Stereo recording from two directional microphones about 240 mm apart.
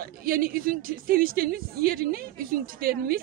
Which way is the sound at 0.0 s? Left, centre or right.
Right.